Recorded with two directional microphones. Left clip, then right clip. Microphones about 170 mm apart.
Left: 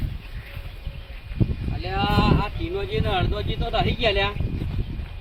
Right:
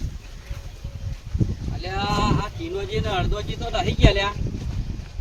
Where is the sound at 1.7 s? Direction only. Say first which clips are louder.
Left 1 dB; 15° right (ahead or behind).